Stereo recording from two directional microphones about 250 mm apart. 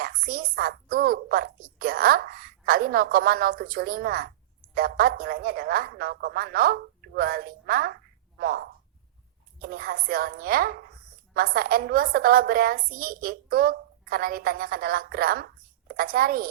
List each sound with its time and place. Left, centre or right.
0.0 s a woman's voice: right